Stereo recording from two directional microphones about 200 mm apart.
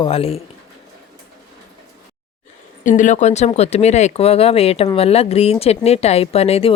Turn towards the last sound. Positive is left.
turn(degrees=30)  # may be behind; listen again after turning